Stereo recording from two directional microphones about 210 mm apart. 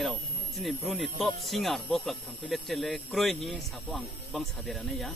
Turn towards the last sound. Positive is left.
turn(degrees=0)  # may be behind; listen again after turning